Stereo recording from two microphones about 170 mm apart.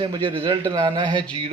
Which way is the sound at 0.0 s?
30° right (ahead or behind).